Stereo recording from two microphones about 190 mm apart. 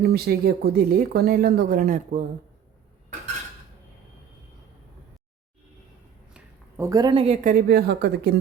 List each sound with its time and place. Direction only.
0.0 s speech: 55° right (ahead or behind)
6.3 s a sound: 15° right (ahead or behind)
7.4 s speech: 50° right (ahead or behind)